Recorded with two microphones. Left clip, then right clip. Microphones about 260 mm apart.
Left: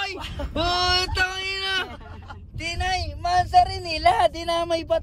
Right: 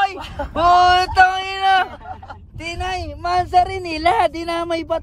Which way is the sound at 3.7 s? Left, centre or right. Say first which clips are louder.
Right 2 dB; right.